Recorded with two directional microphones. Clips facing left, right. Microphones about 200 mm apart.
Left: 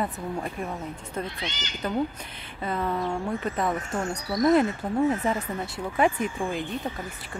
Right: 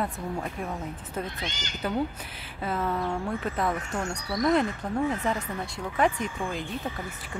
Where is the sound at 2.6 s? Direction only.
5° right (ahead or behind).